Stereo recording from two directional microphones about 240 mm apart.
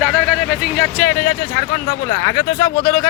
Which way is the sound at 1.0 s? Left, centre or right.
Centre.